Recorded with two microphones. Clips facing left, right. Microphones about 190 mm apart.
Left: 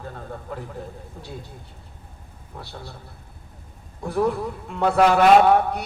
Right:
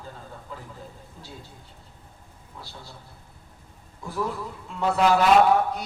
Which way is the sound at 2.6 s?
60° left (ahead or behind).